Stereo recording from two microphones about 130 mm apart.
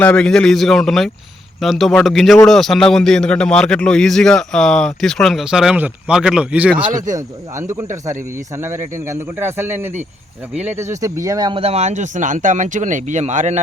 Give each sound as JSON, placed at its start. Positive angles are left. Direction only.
{"t": 0.0, "sound": "a man's voice", "side_deg": 10}
{"t": 6.9, "sound": "speech", "side_deg": -80}
{"t": 7.5, "sound": "speech", "side_deg": -20}
{"t": 11.5, "sound": "speech", "side_deg": -50}